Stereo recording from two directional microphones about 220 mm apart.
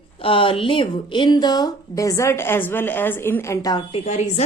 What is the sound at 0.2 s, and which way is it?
Speech, 25° left (ahead or behind).